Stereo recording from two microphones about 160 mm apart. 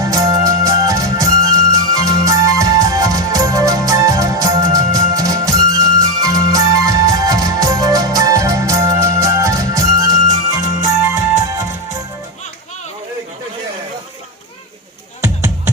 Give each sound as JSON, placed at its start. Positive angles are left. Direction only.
{"t": 0.0, "sound": "music", "side_deg": -20}